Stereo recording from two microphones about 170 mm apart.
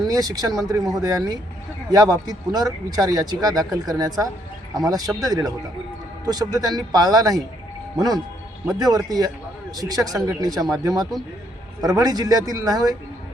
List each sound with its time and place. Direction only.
0.1 s speech: 20° right (ahead or behind)